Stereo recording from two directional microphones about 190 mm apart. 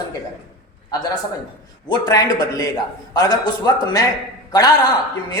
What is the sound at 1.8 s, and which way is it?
A man's voice, 20° left (ahead or behind).